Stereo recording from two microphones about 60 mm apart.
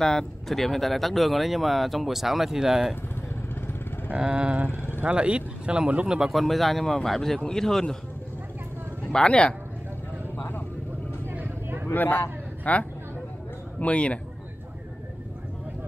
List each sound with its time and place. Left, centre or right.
0.0 s speech: centre
4.1 s speech: centre
4.6 s vehicle: left
5.0 s speech: centre
6.3 s a man's voice: centre
9.1 s a man's voice: centre
10.3 s vehicle: left
11.3 s vehicle: right
11.9 s a man's voice: left